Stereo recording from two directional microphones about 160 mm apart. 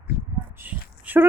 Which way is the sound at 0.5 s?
10° right (ahead or behind).